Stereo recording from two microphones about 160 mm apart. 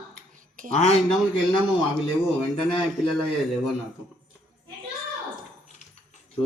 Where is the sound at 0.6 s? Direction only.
60° right (ahead or behind).